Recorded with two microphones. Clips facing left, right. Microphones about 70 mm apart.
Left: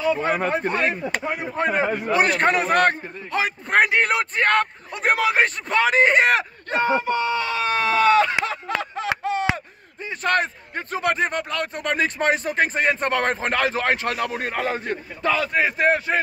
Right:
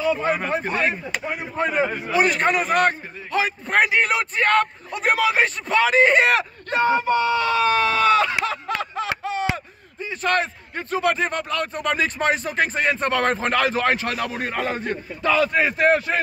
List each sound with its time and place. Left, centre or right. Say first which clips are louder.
0.2 s a man's voice: left 1 dB; left
11.0 s speech: right 1 dB; left
11.2 s speech: even; left
11.6 s speech: even; left
15.4 s a man's voice: right 1 dB; centre